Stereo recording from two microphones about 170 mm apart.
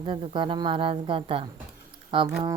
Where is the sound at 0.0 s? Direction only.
30° right (ahead or behind).